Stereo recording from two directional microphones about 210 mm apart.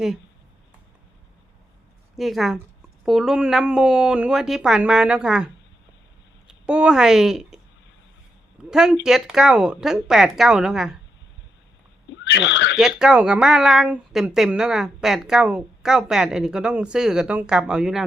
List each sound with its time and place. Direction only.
2.1 s speech: centre (ahead or behind)
6.7 s speech: 5° right (ahead or behind)
8.7 s speech: centre (ahead or behind)
12.2 s speech: 55° left (ahead or behind)
12.7 s speech: centre (ahead or behind)